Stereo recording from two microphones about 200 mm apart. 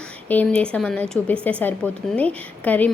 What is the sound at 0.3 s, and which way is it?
Speech, 5° left (ahead or behind).